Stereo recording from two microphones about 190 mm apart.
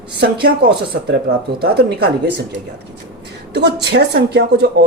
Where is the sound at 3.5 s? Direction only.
60° right (ahead or behind).